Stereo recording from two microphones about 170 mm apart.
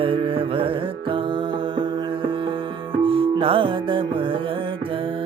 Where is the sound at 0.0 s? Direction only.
30° right (ahead or behind).